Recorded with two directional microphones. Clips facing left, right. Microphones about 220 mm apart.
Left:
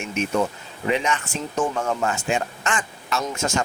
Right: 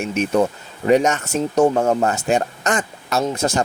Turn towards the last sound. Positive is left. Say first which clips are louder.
# right 5 dB
turn(degrees=-35)  # may be behind; listen again after turning